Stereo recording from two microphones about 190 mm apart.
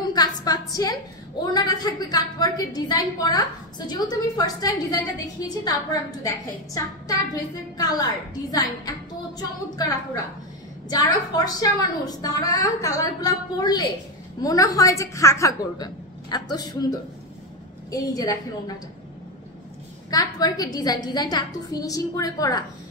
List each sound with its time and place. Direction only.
0.0 s a sound: 20° left (ahead or behind)
1.4 s a woman's voice: 20° left (ahead or behind)
20.1 s a woman's voice: 20° left (ahead or behind)